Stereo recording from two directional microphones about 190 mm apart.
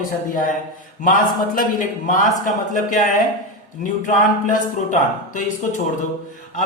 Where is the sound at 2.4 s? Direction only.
45° left (ahead or behind).